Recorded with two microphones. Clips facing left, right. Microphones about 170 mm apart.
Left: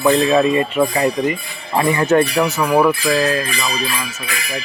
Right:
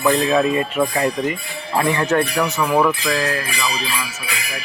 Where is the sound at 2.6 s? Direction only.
15° left (ahead or behind).